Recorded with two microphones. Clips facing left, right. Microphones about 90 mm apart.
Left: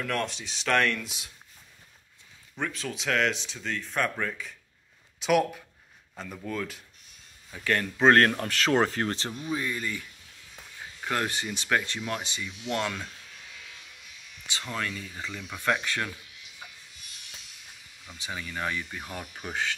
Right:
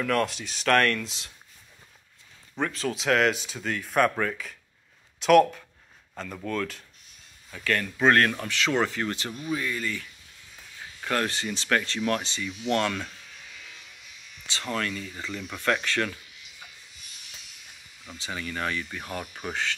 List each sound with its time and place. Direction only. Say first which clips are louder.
0.0 s speech: right 5 dB; centre (ahead or behind)
2.6 s speech: right 4 dB; centre (ahead or behind)
7.5 s speech: even; 20° left (ahead or behind)
8.1 s speech: left 1 dB; 35° left (ahead or behind); by 13.1 s 10° left (ahead or behind)
14.8 s speech: right 2 dB; 20° left (ahead or behind)
18.1 s speech: right 2 dB; 15° left (ahead or behind)